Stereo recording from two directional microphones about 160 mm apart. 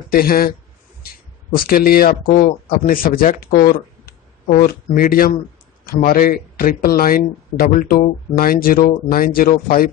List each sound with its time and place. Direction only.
0.1 s speech: 70° left (ahead or behind)
1.6 s speech: 70° left (ahead or behind)